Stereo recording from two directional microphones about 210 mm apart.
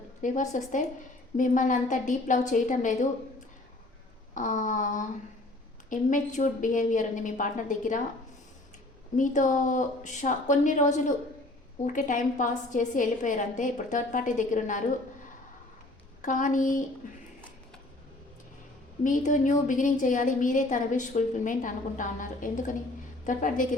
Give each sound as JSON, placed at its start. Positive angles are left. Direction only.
{"t": 0.2, "sound": "a woman's voice", "side_deg": 35}
{"t": 4.4, "sound": "a woman's voice", "side_deg": 40}
{"t": 9.1, "sound": "a woman's voice", "side_deg": 35}
{"t": 16.2, "sound": "a woman's voice", "side_deg": 35}
{"t": 19.0, "sound": "a woman's voice", "side_deg": 40}